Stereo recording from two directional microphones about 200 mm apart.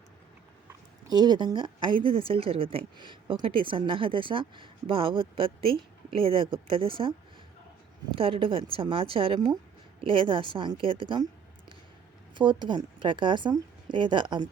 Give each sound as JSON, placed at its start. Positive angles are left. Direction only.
{"t": 0.7, "sound": "a woman's voice", "side_deg": -20}
{"t": 8.1, "sound": "a woman's voice", "side_deg": -25}
{"t": 12.3, "sound": "a woman's voice", "side_deg": -25}